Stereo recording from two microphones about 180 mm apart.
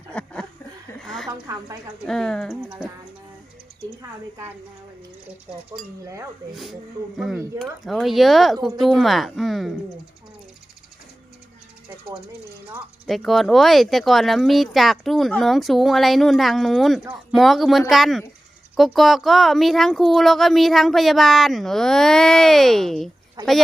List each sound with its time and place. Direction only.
0.1 s a sound: 5° left (ahead or behind)
1.3 s a woman's voice: 20° right (ahead or behind)
2.0 s speech: centre (ahead or behind)
7.2 s speech: centre (ahead or behind)
13.1 s speech: centre (ahead or behind)